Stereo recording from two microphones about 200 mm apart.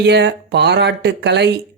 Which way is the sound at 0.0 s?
55° right (ahead or behind).